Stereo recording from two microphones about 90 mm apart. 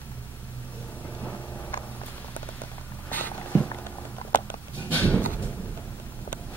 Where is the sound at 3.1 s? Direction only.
20° left (ahead or behind).